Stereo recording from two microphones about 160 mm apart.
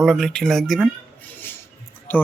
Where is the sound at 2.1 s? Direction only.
10° left (ahead or behind).